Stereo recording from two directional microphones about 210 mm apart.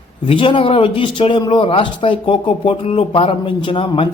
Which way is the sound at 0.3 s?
25° left (ahead or behind).